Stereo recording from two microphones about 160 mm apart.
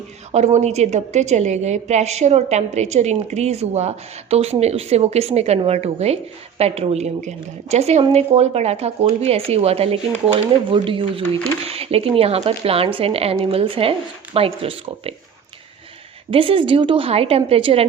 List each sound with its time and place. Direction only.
0.3 s a woman's voice: 45° right (ahead or behind)
16.3 s a woman's voice: 35° right (ahead or behind)